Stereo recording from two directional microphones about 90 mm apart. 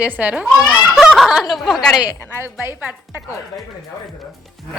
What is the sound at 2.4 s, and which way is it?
Speech, 30° right (ahead or behind).